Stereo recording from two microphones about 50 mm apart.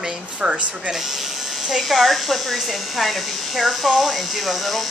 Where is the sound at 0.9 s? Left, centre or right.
Centre.